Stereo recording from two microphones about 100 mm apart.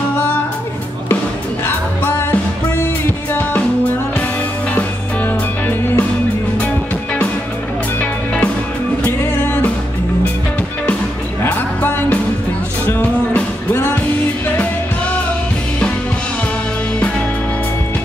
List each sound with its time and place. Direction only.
4.7 s music: 15° left (ahead or behind)
9.0 s music: 20° left (ahead or behind)
11.4 s music: 15° left (ahead or behind)